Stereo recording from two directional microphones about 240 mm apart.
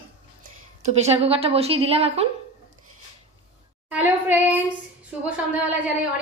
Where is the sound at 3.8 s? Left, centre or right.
Centre.